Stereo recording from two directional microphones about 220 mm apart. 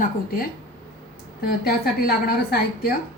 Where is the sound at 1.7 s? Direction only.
45° left (ahead or behind).